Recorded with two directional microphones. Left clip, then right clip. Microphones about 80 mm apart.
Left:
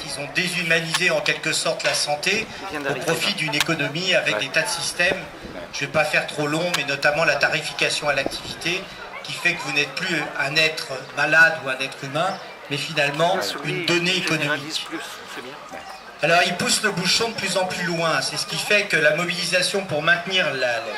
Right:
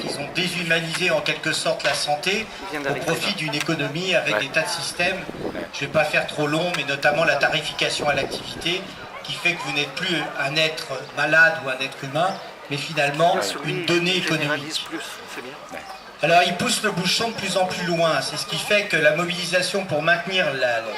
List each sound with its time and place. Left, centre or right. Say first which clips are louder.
0.1 s a man's voice: left 2 dB; left
2.7 s a man's voice: even; centre
3.0 s a man's voice: left 1 dB; left
13.3 s a man's voice: right 1 dB; centre
13.8 s a man's voice: even; left
14.5 s a man's voice: even; centre
16.2 s a man's voice: right 1 dB; left